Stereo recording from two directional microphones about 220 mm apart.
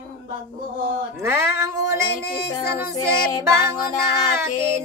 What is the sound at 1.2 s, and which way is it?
Music, 10° right (ahead or behind).